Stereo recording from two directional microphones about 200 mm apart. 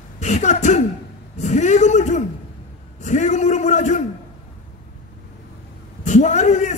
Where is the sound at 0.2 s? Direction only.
35° left (ahead or behind).